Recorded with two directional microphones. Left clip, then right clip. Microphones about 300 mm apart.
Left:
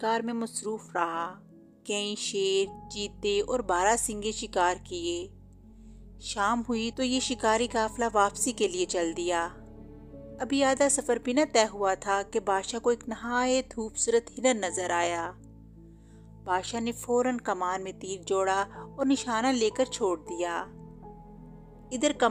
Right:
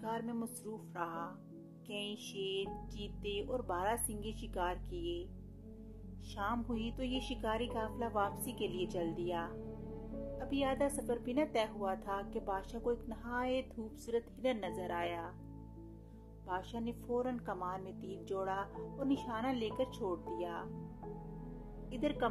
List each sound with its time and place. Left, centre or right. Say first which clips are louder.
0.0 s a woman's voice: left 12 dB; left
16.4 s a woman's voice: left 12 dB; left
21.9 s a woman's voice: left 11 dB; left